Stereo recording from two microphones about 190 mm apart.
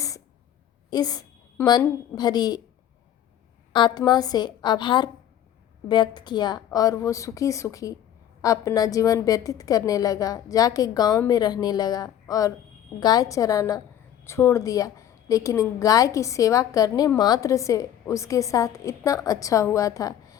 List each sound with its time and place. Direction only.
0.9 s a woman's voice: 20° left (ahead or behind)
3.7 s a woman's voice: 25° left (ahead or behind)